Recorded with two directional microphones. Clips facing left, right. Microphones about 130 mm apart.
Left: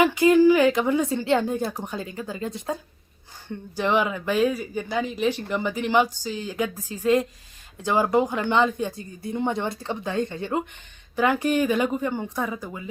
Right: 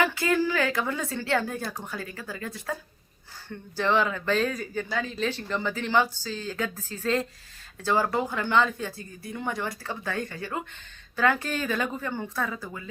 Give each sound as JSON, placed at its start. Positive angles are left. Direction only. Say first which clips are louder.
{"t": 0.0, "sound": "speech", "louder": "left 8 dB", "side_deg": 15}